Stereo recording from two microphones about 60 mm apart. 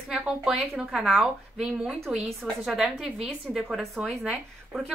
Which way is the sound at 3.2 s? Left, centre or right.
Centre.